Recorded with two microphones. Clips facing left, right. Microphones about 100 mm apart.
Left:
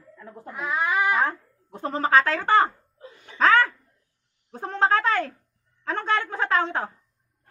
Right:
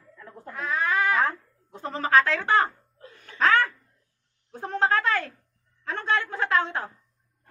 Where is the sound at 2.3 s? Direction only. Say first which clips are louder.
Left 3 dB; 50° left (ahead or behind).